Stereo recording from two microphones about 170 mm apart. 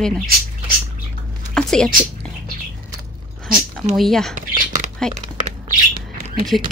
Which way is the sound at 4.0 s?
Centre (ahead or behind).